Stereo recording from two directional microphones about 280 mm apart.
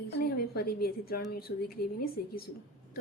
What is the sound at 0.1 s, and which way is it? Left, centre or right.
A woman's voice, left.